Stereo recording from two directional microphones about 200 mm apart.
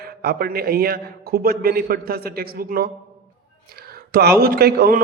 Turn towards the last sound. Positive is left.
turn(degrees=-50)  # may be behind; listen again after turning